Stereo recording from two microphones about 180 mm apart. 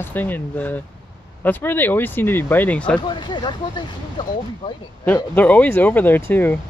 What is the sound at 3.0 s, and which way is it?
Speech, 25° left (ahead or behind).